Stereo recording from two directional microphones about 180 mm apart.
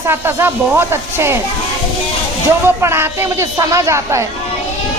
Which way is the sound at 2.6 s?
15° right (ahead or behind).